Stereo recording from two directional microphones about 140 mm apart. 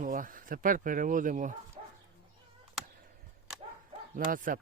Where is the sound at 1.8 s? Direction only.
45° right (ahead or behind).